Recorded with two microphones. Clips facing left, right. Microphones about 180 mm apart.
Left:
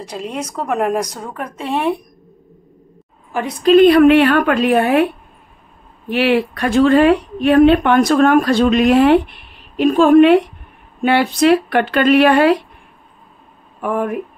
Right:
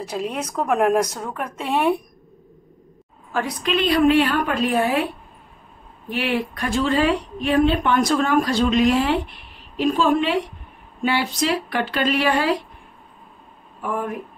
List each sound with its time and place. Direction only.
0.0 s a woman's voice: 5° right (ahead or behind)
3.8 s a woman's voice: 60° left (ahead or behind)
6.0 s a woman's voice: 75° left (ahead or behind)
13.7 s speech: 65° left (ahead or behind)